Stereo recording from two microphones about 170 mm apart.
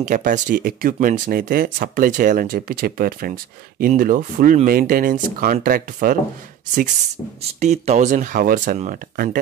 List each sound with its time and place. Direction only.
0.0 s speech: 50° right (ahead or behind)
7.6 s speech: 40° right (ahead or behind); by 9.4 s 55° right (ahead or behind)